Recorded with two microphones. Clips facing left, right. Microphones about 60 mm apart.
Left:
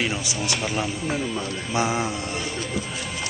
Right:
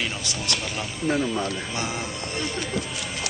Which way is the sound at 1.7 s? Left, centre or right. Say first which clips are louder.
Left 11 dB; centre.